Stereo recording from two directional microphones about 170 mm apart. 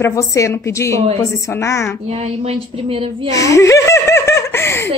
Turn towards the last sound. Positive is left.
turn(degrees=15)  # may be behind; listen again after turning